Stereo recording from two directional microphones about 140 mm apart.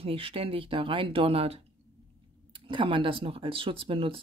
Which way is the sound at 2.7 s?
35° right (ahead or behind).